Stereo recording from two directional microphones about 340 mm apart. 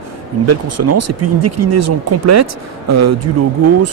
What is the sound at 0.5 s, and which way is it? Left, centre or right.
Speech, right.